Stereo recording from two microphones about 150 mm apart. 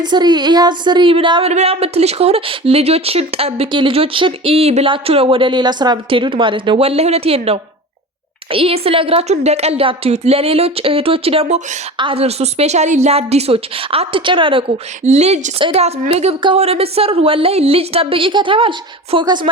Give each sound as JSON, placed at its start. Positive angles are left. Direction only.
{"t": 0.0, "sound": "a woman's voice", "side_deg": -30}
{"t": 15.0, "sound": "speech", "side_deg": -45}